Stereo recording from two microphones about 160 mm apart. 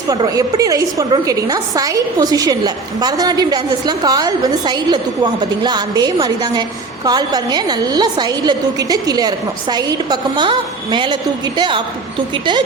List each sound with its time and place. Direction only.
0.1 s a woman's voice: 20° right (ahead or behind)